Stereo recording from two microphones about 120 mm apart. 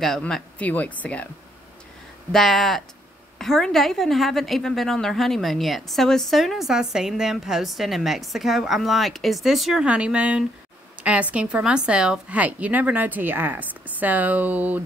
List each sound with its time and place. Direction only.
0.0 s speech: 5° left (ahead or behind)
2.3 s a woman's voice: centre (ahead or behind); by 14.8 s 15° right (ahead or behind)